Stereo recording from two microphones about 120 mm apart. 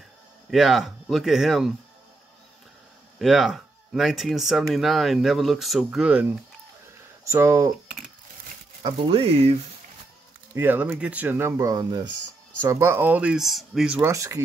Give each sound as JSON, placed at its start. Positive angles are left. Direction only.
{"t": 0.5, "sound": "speech", "side_deg": 0}
{"t": 3.2, "sound": "speech", "side_deg": 0}
{"t": 7.2, "sound": "speech", "side_deg": -20}
{"t": 9.0, "sound": "speech", "side_deg": -50}
{"t": 10.5, "sound": "speech", "side_deg": -15}
{"t": 12.6, "sound": "speech", "side_deg": -25}
{"t": 14.0, "sound": "speech", "side_deg": -25}